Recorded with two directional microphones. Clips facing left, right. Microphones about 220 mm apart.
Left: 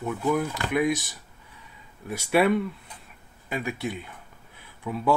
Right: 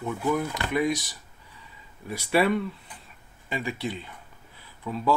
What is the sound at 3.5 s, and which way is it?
Speech, 5° left (ahead or behind).